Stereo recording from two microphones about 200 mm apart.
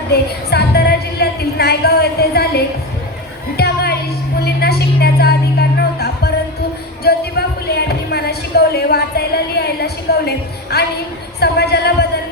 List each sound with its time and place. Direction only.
0.1 s speech: 55° left (ahead or behind)
3.6 s music: 55° left (ahead or behind)
4.4 s a sound: 55° left (ahead or behind)